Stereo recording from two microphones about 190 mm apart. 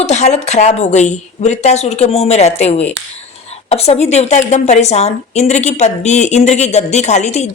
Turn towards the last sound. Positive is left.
turn(degrees=35)  # may be behind; listen again after turning